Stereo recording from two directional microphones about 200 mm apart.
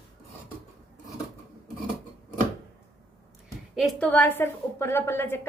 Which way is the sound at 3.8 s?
Centre (ahead or behind).